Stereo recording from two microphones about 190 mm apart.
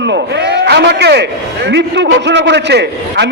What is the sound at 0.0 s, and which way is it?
A man's voice, 65° right (ahead or behind).